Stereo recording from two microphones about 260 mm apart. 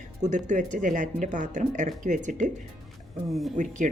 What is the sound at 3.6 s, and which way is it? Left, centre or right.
Speech, right.